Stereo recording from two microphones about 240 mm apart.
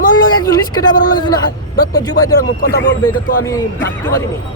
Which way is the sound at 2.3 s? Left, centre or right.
Left.